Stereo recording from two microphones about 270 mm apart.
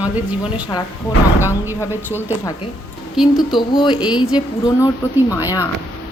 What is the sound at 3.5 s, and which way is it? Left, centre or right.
A woman's voice, centre.